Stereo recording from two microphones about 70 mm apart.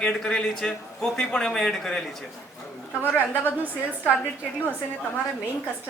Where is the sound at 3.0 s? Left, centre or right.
Left.